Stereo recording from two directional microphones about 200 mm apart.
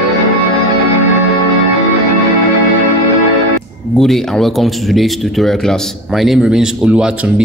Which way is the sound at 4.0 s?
Centre (ahead or behind).